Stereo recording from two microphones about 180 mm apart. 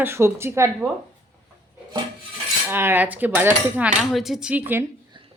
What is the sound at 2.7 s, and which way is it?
Speech, 10° right (ahead or behind).